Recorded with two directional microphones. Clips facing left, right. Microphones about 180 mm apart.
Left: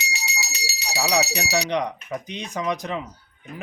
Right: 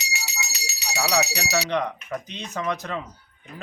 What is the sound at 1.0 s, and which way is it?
Speech, 15° left (ahead or behind).